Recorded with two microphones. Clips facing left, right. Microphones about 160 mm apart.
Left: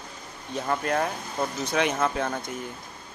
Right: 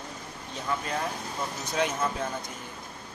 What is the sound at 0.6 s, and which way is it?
Speech, 60° left (ahead or behind).